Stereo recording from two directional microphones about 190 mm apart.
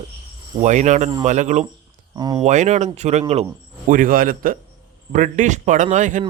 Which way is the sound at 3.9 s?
45° right (ahead or behind).